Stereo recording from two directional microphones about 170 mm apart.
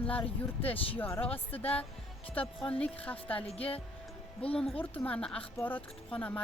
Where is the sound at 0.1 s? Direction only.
10° left (ahead or behind).